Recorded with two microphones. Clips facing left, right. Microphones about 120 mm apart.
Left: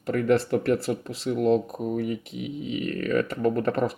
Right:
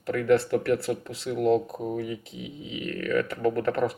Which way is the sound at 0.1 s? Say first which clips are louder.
Even; 30° left (ahead or behind).